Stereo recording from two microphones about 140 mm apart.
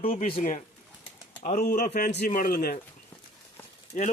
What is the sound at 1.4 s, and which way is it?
Speech, 75° left (ahead or behind).